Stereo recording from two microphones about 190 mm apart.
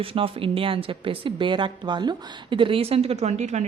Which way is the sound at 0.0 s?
30° right (ahead or behind).